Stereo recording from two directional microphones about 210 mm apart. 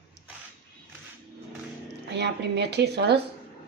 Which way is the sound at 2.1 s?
55° right (ahead or behind).